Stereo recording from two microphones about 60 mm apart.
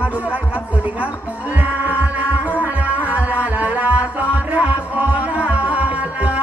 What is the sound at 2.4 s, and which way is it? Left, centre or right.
Music, left.